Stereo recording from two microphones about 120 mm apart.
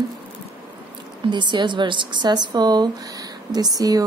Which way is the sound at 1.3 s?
40° right (ahead or behind).